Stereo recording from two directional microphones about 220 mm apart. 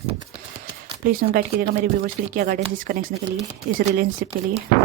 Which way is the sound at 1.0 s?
45° right (ahead or behind).